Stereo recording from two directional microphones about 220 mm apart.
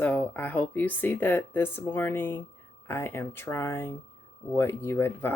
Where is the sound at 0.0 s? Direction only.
10° left (ahead or behind).